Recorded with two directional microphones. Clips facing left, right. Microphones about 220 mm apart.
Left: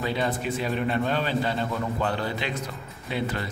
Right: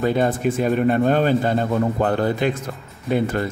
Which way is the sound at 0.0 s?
50° right (ahead or behind).